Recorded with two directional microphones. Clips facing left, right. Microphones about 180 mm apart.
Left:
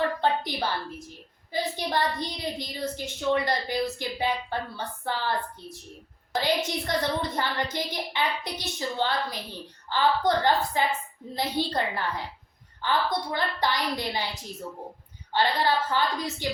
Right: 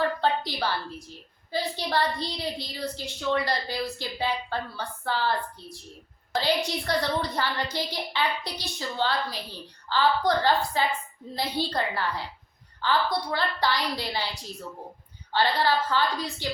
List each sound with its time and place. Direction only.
0.2 s a woman's voice: 15° left (ahead or behind)
15.3 s a woman's voice: 15° left (ahead or behind)